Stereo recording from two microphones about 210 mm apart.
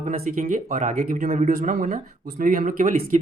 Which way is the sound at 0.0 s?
35° right (ahead or behind).